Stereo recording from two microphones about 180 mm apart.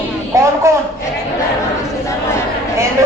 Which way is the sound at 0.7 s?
15° right (ahead or behind).